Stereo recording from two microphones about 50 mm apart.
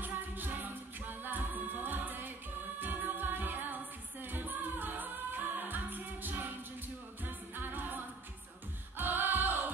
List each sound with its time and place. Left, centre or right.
0.0 s music: right
7.5 s music: right